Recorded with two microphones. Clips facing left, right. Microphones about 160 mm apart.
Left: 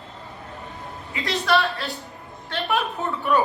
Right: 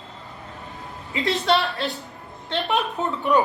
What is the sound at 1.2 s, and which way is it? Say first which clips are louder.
A man's voice: right 1 dB; 20° right (ahead or behind).